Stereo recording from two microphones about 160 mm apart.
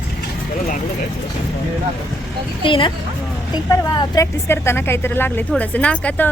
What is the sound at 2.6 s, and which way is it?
A woman's voice, 35° left (ahead or behind).